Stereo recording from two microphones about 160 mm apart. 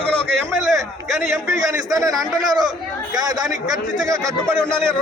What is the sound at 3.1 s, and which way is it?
A man's voice, 25° right (ahead or behind).